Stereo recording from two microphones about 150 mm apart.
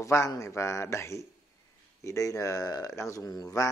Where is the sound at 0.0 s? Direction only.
20° left (ahead or behind).